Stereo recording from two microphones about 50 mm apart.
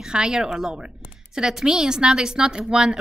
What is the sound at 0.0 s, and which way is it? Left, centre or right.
A woman's voice, centre.